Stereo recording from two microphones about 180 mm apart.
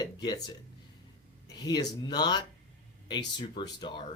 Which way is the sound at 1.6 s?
20° left (ahead or behind).